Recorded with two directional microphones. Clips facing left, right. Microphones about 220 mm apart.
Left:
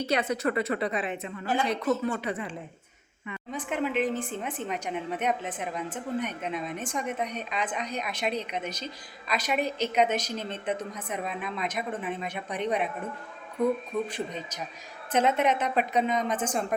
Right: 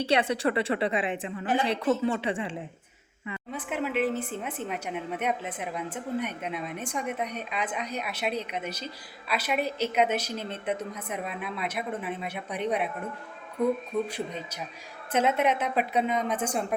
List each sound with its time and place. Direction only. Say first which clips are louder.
0.0 s speech: right 2 dB; 30° right (ahead or behind)
3.5 s a woman's voice: left 1 dB; 5° right (ahead or behind)
14.1 s a woman's voice: even; 10° right (ahead or behind)